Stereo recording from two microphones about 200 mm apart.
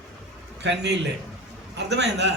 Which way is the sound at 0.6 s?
60° right (ahead or behind).